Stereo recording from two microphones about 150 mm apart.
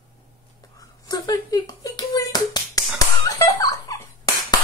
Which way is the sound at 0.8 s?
25° left (ahead or behind).